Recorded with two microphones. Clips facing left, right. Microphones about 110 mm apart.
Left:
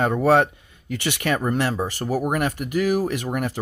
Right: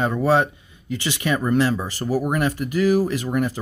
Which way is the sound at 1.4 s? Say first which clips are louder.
Right 3 dB; 50° left (ahead or behind).